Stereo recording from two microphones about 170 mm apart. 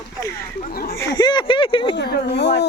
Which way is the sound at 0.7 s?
60° left (ahead or behind).